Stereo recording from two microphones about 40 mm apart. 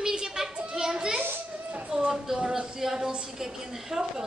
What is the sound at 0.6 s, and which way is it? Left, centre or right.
Children playing, centre.